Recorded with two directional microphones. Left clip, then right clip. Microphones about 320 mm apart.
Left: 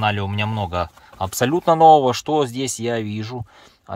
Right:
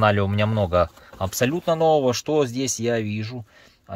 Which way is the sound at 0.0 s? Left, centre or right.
Centre.